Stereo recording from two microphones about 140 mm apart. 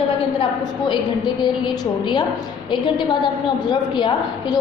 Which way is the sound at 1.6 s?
30° left (ahead or behind).